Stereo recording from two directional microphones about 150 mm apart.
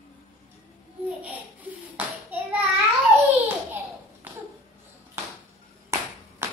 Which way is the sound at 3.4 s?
15° right (ahead or behind).